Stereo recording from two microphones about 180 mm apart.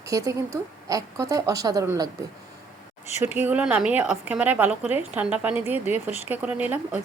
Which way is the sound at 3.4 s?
10° right (ahead or behind).